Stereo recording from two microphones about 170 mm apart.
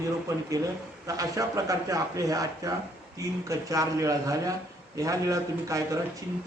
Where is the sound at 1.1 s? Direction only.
20° right (ahead or behind).